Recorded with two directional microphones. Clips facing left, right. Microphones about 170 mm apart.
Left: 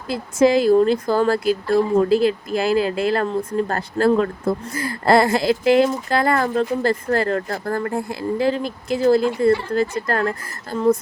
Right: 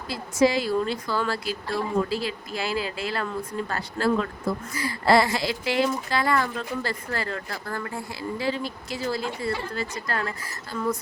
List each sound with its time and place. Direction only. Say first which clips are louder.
0.1 s speech: left 6 dB; 50° left (ahead or behind)